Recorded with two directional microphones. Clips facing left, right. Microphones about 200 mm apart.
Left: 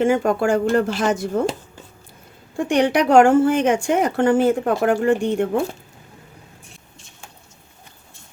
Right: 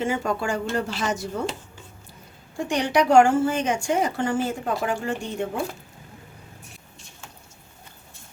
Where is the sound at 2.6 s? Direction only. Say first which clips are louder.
Left 5 dB; 55° left (ahead or behind).